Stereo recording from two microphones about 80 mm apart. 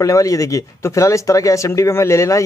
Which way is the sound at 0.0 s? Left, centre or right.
Left.